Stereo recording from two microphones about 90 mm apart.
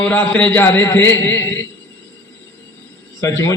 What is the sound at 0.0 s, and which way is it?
A man's voice, 15° left (ahead or behind).